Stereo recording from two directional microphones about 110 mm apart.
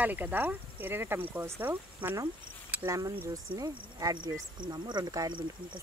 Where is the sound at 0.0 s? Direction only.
15° right (ahead or behind).